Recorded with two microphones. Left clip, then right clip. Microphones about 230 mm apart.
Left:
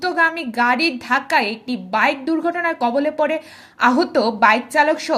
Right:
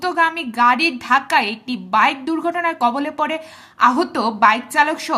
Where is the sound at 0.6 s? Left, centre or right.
Centre.